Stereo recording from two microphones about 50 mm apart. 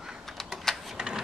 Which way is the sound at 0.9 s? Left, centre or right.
Centre.